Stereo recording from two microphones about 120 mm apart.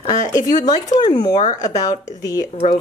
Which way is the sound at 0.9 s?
35° left (ahead or behind).